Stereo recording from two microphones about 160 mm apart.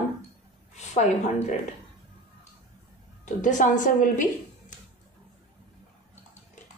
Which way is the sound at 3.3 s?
55° left (ahead or behind).